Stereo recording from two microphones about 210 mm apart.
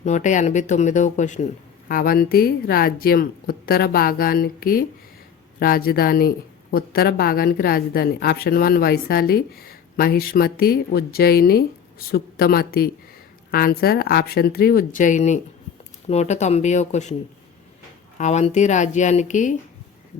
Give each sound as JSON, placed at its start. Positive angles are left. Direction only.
{"t": 0.0, "sound": "speech", "side_deg": 35}
{"t": 18.2, "sound": "speech", "side_deg": 35}